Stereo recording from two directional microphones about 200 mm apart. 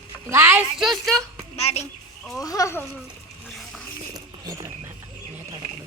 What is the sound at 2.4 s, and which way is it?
Speech, 15° left (ahead or behind).